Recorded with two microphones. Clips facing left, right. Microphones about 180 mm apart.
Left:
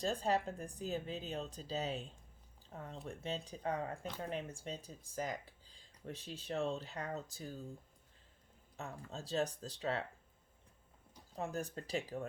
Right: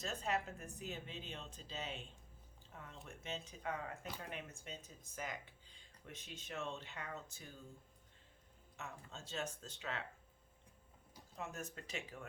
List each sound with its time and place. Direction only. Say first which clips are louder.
0.0 s speech: left 6 dB; 35° left (ahead or behind)
8.7 s speech: left 5 dB; 35° left (ahead or behind)
11.3 s speech: left 7 dB; 35° left (ahead or behind)